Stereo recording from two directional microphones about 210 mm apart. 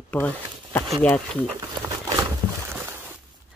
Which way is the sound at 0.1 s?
5° left (ahead or behind).